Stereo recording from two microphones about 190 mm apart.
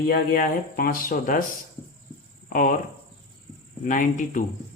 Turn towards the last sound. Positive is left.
turn(degrees=40)  # may be behind; listen again after turning